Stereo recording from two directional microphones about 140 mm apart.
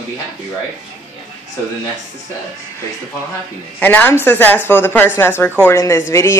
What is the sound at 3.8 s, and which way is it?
Speech, 15° left (ahead or behind).